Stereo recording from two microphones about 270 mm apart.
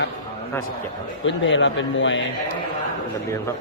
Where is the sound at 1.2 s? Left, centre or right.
Left.